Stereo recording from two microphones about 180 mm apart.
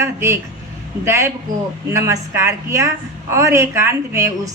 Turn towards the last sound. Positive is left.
turn(degrees=-15)  # may be behind; listen again after turning